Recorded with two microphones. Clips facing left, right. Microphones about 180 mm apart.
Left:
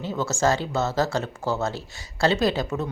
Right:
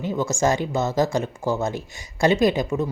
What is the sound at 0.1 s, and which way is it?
Speech, 15° right (ahead or behind).